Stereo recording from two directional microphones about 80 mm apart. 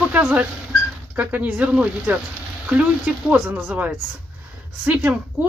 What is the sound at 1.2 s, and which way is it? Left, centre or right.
A woman's voice, centre.